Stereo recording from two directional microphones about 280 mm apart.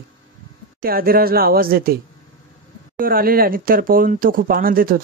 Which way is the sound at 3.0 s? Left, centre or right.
Right.